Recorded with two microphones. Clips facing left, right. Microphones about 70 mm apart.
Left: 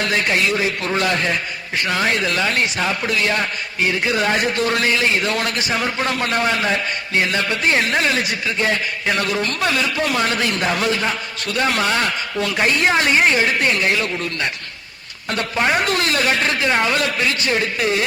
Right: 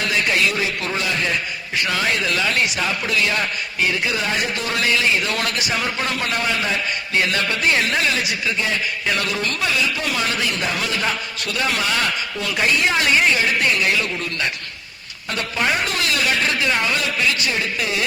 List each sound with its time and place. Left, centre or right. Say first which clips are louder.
0.3 s a man's voice: left 1 dB; left
0.9 s a man's voice: left 6 dB; left
1.8 s a woman's voice: left 2 dB; left
6.1 s a woman's voice: left 3 dB; left
7.2 s a woman's voice: left 1 dB; left